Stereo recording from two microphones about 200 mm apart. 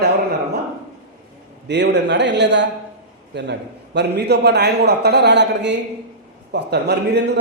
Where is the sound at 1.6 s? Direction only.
60° right (ahead or behind).